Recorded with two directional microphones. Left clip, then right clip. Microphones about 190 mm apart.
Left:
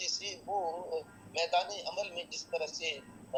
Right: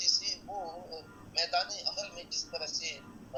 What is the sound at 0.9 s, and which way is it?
A man's voice, 15° left (ahead or behind).